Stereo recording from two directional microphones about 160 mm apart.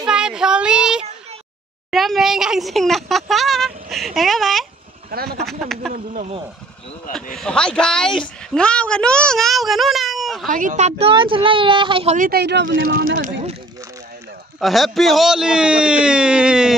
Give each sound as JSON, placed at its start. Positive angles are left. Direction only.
{"t": 0.0, "sound": "child singing", "side_deg": -5}
{"t": 1.9, "sound": "speech", "side_deg": 0}
{"t": 5.1, "sound": "speech", "side_deg": -70}
{"t": 5.4, "sound": "speech", "side_deg": 0}
{"t": 5.9, "sound": "speech", "side_deg": -55}
{"t": 7.3, "sound": "speech", "side_deg": 5}
{"t": 10.5, "sound": "speech", "side_deg": -55}
{"t": 12.2, "sound": "speech", "side_deg": -80}
{"t": 14.6, "sound": "speech", "side_deg": 0}